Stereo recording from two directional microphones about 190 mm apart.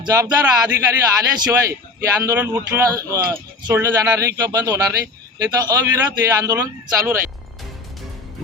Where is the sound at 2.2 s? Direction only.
15° right (ahead or behind).